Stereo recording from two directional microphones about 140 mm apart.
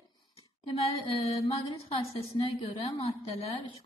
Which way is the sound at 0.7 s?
45° left (ahead or behind).